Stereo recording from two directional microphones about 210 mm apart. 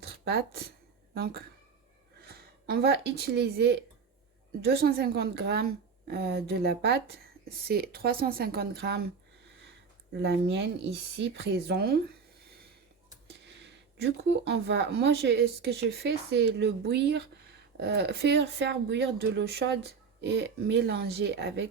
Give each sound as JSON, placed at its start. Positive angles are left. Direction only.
{"t": 0.0, "sound": "a woman's voice", "side_deg": -50}
{"t": 10.2, "sound": "a woman's voice", "side_deg": -55}
{"t": 13.2, "sound": "a woman's voice", "side_deg": -55}